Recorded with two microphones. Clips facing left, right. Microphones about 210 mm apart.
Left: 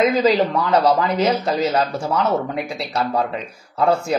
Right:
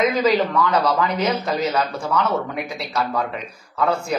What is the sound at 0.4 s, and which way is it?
Speech, 30° left (ahead or behind).